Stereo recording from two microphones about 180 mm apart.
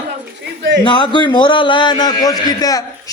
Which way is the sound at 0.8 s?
25° left (ahead or behind).